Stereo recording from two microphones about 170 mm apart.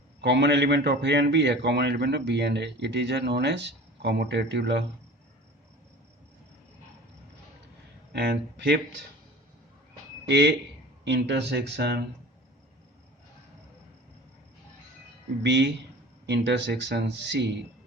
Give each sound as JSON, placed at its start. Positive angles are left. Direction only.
{"t": 0.2, "sound": "a man's voice", "side_deg": -90}
{"t": 8.1, "sound": "speech", "side_deg": -85}
{"t": 10.2, "sound": "a man's voice", "side_deg": -80}
{"t": 15.4, "sound": "a man's voice", "side_deg": -85}